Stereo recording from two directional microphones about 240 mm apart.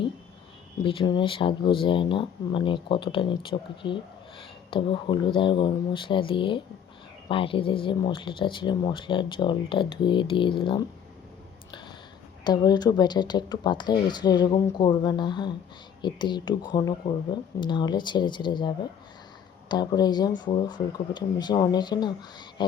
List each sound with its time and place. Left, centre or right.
0.9 s speech: centre
12.5 s speech: centre